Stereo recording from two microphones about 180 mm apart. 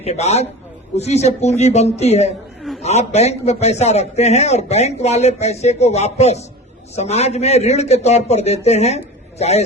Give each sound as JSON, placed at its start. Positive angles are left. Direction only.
{"t": 0.0, "sound": "a man's voice", "side_deg": 35}
{"t": 2.6, "sound": "a sound", "side_deg": 0}
{"t": 2.8, "sound": "a man's voice", "side_deg": 35}